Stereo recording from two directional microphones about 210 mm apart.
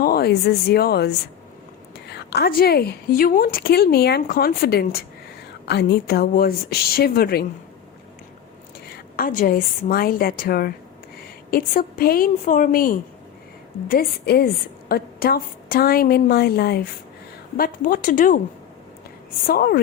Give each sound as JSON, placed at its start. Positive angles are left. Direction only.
{"t": 0.0, "sound": "a woman's voice", "side_deg": 45}
{"t": 9.1, "sound": "a woman's voice", "side_deg": 40}
{"t": 19.5, "sound": "a woman's voice", "side_deg": 45}